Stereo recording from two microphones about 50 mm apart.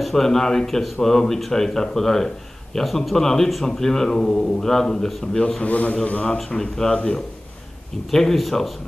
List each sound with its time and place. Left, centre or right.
0.0 s a man's voice: centre; by 6.3 s left
6.5 s a man's voice: centre
8.1 s a man's voice: centre